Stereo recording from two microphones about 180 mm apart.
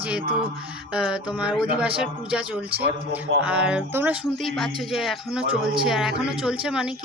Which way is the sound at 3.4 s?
5° right (ahead or behind).